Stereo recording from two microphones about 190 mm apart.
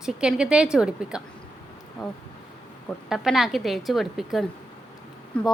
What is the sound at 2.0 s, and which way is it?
Speech, 20° left (ahead or behind).